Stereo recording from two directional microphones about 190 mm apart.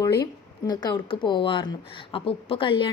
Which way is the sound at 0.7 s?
20° left (ahead or behind).